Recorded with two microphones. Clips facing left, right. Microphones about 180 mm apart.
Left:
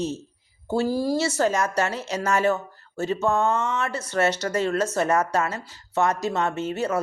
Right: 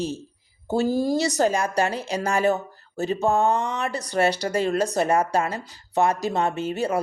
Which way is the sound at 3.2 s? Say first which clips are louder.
Right 2 dB; 35° right (ahead or behind).